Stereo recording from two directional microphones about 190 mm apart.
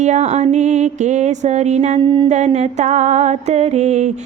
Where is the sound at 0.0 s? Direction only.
35° right (ahead or behind).